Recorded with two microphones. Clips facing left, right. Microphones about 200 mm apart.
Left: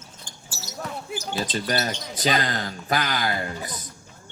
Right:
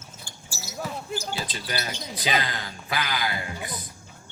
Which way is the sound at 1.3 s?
45° left (ahead or behind).